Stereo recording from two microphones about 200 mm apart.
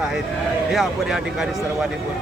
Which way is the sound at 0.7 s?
Centre (ahead or behind).